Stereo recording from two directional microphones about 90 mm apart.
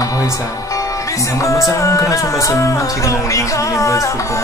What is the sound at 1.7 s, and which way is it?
Music, 35° left (ahead or behind).